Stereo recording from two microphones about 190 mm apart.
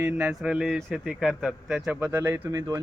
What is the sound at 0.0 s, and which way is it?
Speech, 5° right (ahead or behind).